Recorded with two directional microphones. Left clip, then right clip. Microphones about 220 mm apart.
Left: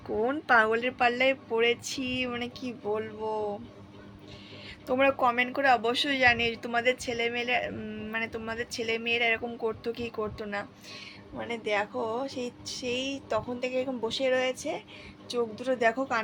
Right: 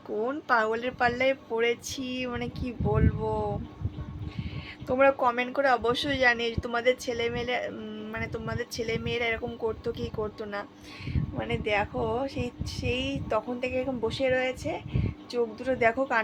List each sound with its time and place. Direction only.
0.2 s speech: 10° right (ahead or behind)
4.9 s speech: 10° right (ahead or behind)